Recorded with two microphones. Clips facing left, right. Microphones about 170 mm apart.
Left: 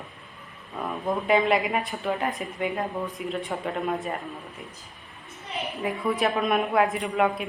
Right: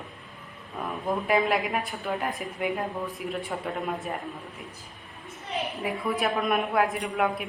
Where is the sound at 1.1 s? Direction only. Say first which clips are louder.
Left 2 dB; centre (ahead or behind).